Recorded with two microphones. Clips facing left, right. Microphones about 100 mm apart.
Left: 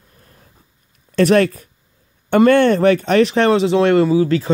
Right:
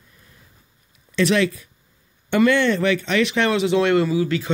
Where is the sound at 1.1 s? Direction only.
45° left (ahead or behind).